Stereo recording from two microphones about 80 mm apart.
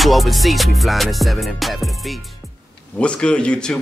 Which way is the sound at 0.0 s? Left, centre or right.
Centre.